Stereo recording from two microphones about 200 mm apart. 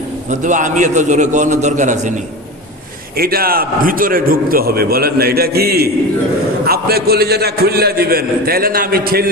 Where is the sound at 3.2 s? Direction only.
50° right (ahead or behind).